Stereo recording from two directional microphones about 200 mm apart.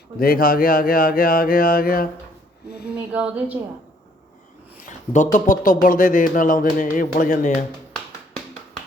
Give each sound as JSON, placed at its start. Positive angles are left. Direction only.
{"t": 0.2, "sound": "speech", "side_deg": 45}
{"t": 2.9, "sound": "speech", "side_deg": -5}
{"t": 4.9, "sound": "speech", "side_deg": 40}